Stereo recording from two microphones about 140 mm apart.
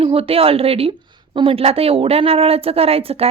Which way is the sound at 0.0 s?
40° right (ahead or behind).